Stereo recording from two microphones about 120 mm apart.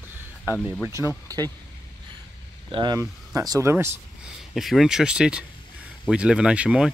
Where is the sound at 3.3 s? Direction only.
30° right (ahead or behind).